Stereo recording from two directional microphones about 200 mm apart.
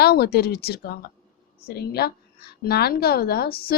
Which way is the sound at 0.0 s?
50° left (ahead or behind).